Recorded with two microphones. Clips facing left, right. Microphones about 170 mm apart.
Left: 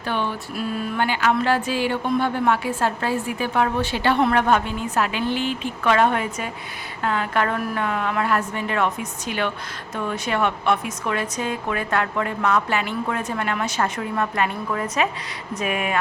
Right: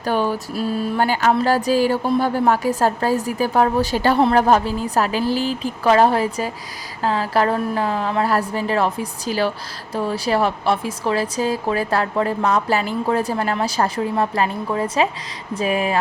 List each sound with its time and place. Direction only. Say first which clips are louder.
0.0 s speech: right 5 dB; 40° right (ahead or behind)